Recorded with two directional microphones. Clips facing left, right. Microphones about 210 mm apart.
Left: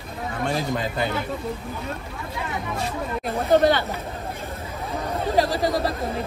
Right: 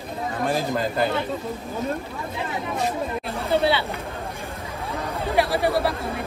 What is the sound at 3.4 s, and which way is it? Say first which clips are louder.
Speech: left 3 dB; 45° left (ahead or behind).